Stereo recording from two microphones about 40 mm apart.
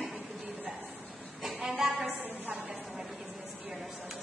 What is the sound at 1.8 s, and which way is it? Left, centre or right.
Speech, centre.